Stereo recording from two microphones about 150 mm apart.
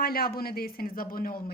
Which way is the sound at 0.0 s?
90° left.